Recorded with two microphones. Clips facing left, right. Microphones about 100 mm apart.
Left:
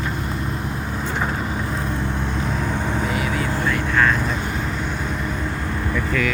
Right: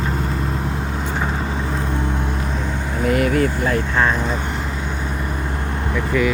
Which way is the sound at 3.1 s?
55° right (ahead or behind).